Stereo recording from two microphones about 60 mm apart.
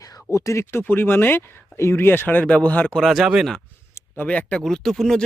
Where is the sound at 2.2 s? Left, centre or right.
Left.